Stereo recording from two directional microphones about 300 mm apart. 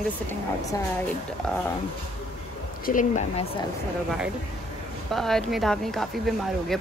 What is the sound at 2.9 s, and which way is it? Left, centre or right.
Speech, left.